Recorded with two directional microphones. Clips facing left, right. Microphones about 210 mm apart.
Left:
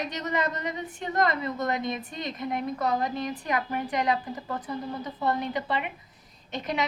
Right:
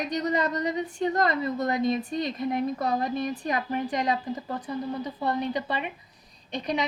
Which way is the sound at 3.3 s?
25° right (ahead or behind).